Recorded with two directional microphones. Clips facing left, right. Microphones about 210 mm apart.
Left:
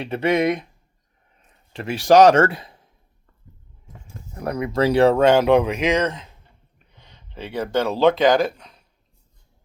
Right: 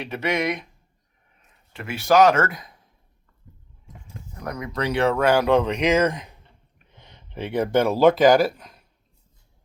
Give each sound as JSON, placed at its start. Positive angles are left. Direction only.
{"t": 0.0, "sound": "speech", "side_deg": 30}
{"t": 4.4, "sound": "speech", "side_deg": 30}